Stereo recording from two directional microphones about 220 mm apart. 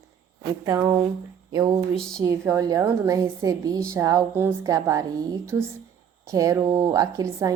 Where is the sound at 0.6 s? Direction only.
15° right (ahead or behind).